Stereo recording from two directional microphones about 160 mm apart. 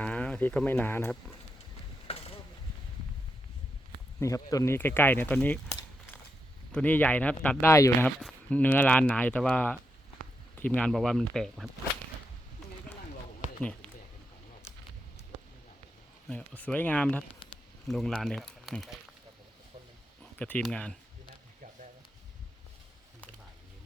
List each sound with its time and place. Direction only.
0.0 s speech: 10° left (ahead or behind)
2.0 s a sound: 40° left (ahead or behind)
4.2 s speech: 20° left (ahead or behind)
6.7 s speech: 10° left (ahead or behind)
7.7 s speech: 20° left (ahead or behind)
8.0 s speech: 10° left (ahead or behind)
13.6 s a sound: 5° left (ahead or behind)
16.3 s speech: 10° left (ahead or behind)
20.3 s speech: 10° left (ahead or behind)